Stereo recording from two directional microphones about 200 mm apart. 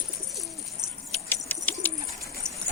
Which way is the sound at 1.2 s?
10° left (ahead or behind).